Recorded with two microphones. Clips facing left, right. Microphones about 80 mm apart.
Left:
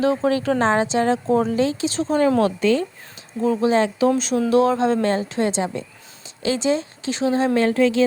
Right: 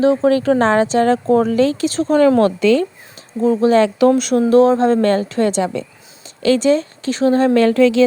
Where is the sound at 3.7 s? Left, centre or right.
Right.